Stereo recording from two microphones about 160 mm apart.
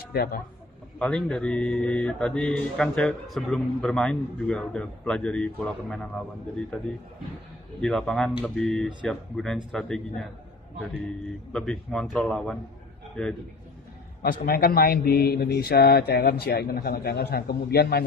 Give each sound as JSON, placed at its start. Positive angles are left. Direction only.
{"t": 0.0, "sound": "speech", "side_deg": 70}
{"t": 0.9, "sound": "speech", "side_deg": 5}
{"t": 7.8, "sound": "speech", "side_deg": 5}
{"t": 11.5, "sound": "speech", "side_deg": 5}
{"t": 14.2, "sound": "a man's voice", "side_deg": 70}